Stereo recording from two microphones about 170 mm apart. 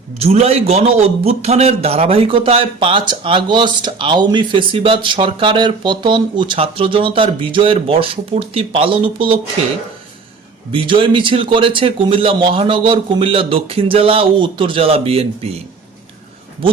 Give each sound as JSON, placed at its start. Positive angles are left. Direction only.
{"t": 0.2, "sound": "a man's voice", "side_deg": -35}
{"t": 10.7, "sound": "a man's voice", "side_deg": -30}